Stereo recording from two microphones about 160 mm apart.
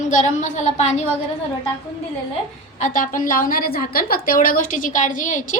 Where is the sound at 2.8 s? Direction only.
55° left (ahead or behind).